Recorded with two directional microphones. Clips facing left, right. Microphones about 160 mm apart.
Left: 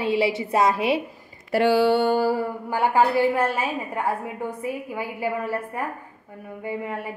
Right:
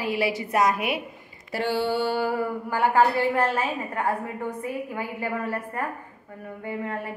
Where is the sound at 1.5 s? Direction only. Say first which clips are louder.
Left 7 dB; 85° left.